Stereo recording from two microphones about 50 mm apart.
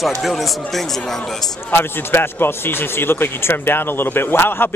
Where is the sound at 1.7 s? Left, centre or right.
Left.